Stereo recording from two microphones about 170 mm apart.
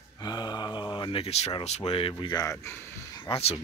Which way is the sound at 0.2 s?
25° left (ahead or behind).